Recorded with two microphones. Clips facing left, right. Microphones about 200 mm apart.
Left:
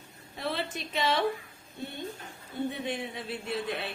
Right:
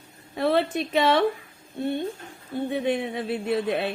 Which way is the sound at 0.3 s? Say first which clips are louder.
Right 11 dB; 60° right (ahead or behind).